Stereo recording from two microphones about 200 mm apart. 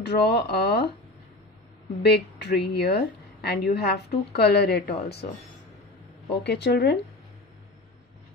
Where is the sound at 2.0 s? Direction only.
55° left (ahead or behind).